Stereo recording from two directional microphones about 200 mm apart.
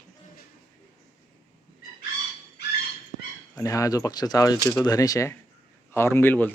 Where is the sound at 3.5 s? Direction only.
15° left (ahead or behind).